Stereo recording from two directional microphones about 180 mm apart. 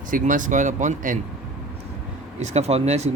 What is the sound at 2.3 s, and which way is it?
Speech, 35° right (ahead or behind).